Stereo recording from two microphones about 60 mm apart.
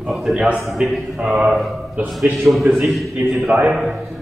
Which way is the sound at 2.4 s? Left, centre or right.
Centre.